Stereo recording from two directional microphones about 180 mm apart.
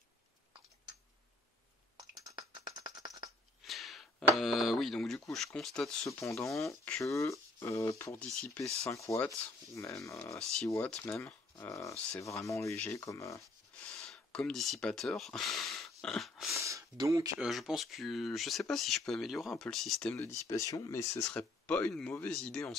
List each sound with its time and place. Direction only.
2.5 s a sound: 20° right (ahead or behind)
3.6 s speech: centre (ahead or behind)
6.0 s speech: 15° left (ahead or behind)
13.7 s speech: 5° left (ahead or behind)
16.6 s speech: 20° right (ahead or behind)
17.4 s speech: centre (ahead or behind)
20.2 s speech: 15° left (ahead or behind)